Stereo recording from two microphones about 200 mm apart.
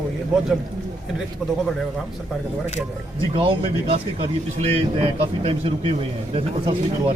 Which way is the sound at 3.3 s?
25° right (ahead or behind).